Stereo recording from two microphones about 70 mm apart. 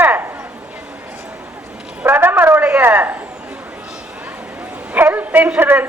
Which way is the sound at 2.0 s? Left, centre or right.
Right.